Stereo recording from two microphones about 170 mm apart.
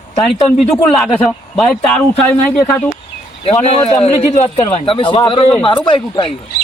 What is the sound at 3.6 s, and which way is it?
Speech, 35° left (ahead or behind).